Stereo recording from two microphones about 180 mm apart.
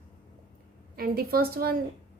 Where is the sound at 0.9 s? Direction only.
55° right (ahead or behind).